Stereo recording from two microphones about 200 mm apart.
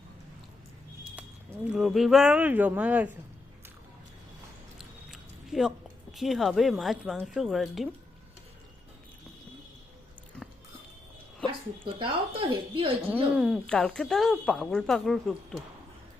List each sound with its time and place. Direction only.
1.6 s speech: 5° right (ahead or behind)
5.1 s speech: centre (ahead or behind)
11.9 s speech: 25° right (ahead or behind)
13.1 s speech: 5° right (ahead or behind)